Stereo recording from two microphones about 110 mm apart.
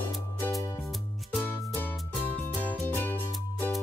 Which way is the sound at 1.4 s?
20° left (ahead or behind).